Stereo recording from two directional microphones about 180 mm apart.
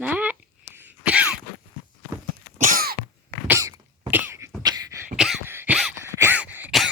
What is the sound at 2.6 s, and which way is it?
Cough, 55° right (ahead or behind).